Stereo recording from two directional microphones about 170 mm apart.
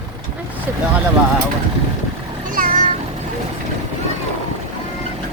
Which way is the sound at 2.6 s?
55° right (ahead or behind).